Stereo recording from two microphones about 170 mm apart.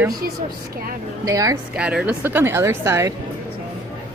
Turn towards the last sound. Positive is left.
turn(degrees=-15)  # may be behind; listen again after turning